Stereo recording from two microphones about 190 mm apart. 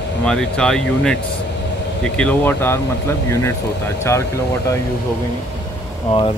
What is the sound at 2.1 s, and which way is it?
Speech, 10° left (ahead or behind).